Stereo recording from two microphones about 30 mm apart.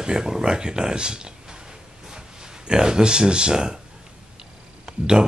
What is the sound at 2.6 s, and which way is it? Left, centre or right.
Speech, right.